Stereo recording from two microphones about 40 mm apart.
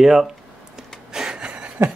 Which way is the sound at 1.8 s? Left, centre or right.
Right.